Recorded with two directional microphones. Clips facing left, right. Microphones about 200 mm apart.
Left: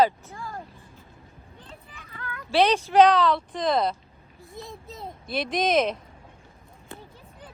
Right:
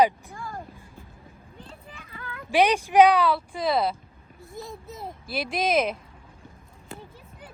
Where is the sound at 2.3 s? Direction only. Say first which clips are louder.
Even; 15° right (ahead or behind).